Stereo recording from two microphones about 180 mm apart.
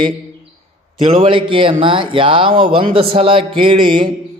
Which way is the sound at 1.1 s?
30° right (ahead or behind).